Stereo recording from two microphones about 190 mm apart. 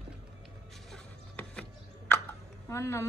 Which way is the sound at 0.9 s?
5° left (ahead or behind).